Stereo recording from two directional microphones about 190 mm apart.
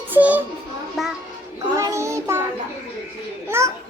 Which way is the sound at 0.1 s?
10° right (ahead or behind).